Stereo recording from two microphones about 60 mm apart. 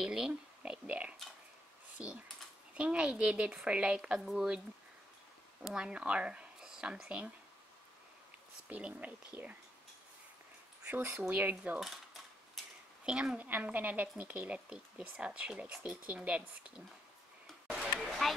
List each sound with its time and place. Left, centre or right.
0.0 s speech: centre
0.3 s a sound: right
2.0 s a woman's voice: centre
5.6 s speech: centre
8.6 s speech: right
10.9 s speech: right
11.8 s cutlery: centre
12.6 s a sound: centre
13.0 s a woman's voice: centre
13.4 s speech: right
18.2 s speech: centre